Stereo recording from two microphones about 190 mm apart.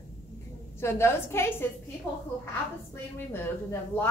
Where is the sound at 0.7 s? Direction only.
15° left (ahead or behind).